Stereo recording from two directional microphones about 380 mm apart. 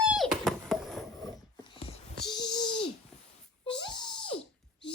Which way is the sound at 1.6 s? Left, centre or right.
Centre.